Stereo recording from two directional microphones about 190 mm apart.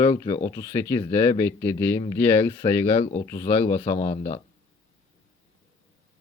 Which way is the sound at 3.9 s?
35° left (ahead or behind).